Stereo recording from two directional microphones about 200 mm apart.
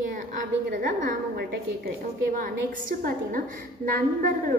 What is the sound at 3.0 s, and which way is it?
A woman's voice, 45° right (ahead or behind).